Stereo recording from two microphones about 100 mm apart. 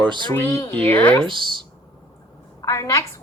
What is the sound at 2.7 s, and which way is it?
Speech, 30° left (ahead or behind).